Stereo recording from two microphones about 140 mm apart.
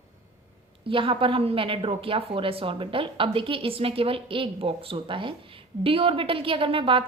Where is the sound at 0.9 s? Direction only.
40° right (ahead or behind).